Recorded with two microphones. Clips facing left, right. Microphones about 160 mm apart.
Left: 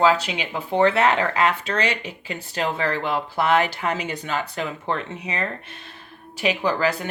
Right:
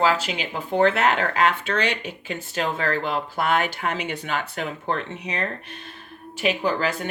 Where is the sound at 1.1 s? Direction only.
35° left (ahead or behind).